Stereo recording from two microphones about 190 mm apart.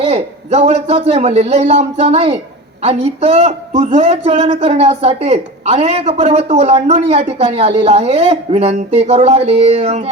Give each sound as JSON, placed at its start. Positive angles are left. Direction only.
{"t": 0.0, "sound": "speech", "side_deg": -35}